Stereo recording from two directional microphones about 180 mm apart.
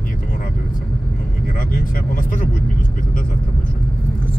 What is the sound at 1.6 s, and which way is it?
Speech, 50° left (ahead or behind).